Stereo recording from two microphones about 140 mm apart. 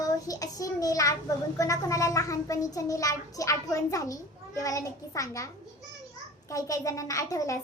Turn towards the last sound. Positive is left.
turn(degrees=25)  # may be behind; listen again after turning